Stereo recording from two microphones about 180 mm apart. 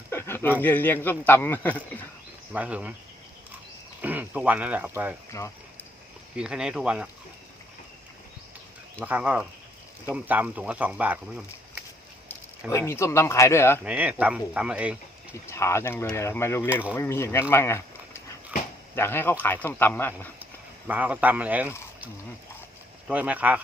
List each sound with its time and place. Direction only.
0.1 s a sound: 15° left (ahead or behind)
0.6 s a man's voice: 10° left (ahead or behind)
2.5 s speech: 5° right (ahead or behind)
4.0 s speech: 10° right (ahead or behind)
5.3 s a man's voice: 20° left (ahead or behind)
6.3 s speech: 5° right (ahead or behind)
9.0 s speech: 10° right (ahead or behind)
12.7 s a man's voice: 15° left (ahead or behind)
13.8 s speech: 10° right (ahead or behind)
15.4 s a man's voice: 15° left (ahead or behind)
17.5 s a sound: 15° left (ahead or behind)
18.9 s a man's voice: 10° left (ahead or behind)
20.4 s speech: 10° right (ahead or behind)
23.0 s speech: 10° right (ahead or behind)